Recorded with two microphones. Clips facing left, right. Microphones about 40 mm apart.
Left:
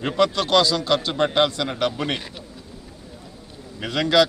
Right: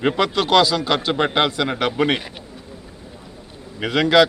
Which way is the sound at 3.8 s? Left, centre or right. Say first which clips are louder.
Right 3 dB; centre.